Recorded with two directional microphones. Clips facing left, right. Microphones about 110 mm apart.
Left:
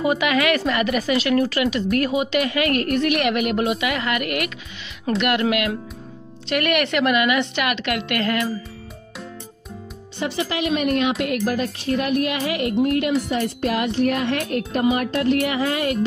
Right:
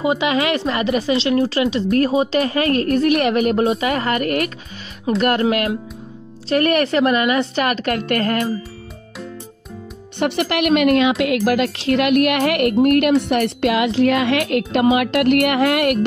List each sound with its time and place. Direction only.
0.0 s a woman's voice: 25° right (ahead or behind); by 8.5 s 40° right (ahead or behind)
10.1 s a woman's voice: 65° right (ahead or behind)